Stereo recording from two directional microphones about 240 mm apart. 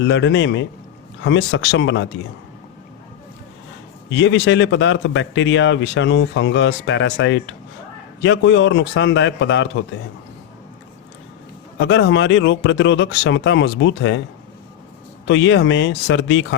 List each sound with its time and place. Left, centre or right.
0.0 s speech: left
4.1 s speech: left
11.8 s speech: left
15.3 s speech: left